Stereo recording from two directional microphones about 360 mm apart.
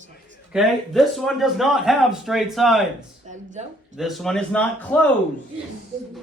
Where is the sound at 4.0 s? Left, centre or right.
Centre.